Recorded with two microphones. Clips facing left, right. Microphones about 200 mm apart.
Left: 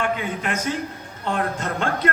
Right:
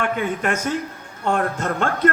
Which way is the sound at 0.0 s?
50° right (ahead or behind).